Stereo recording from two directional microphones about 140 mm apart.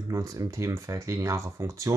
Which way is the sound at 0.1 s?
25° right (ahead or behind).